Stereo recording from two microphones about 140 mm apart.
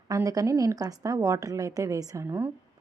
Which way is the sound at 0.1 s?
25° right (ahead or behind).